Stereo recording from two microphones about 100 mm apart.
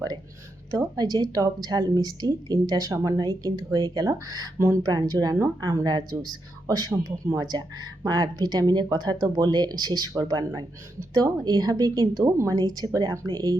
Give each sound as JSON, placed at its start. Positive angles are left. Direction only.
{"t": 0.8, "sound": "a woman's voice", "side_deg": -40}